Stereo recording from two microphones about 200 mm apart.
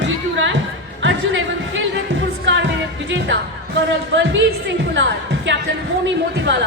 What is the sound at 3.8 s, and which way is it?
Speech, 65° right (ahead or behind).